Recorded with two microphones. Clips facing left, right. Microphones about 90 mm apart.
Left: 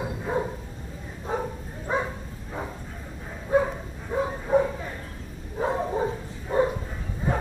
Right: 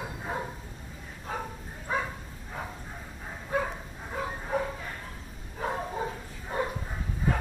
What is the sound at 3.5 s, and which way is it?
Dog, 20° left (ahead or behind).